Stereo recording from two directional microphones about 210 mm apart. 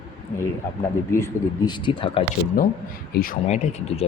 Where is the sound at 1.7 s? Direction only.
25° left (ahead or behind).